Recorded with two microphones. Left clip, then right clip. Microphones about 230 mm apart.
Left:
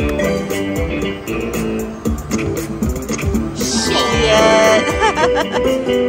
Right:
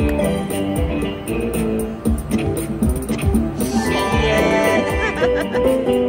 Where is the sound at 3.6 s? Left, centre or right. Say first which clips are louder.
Left 5 dB; centre.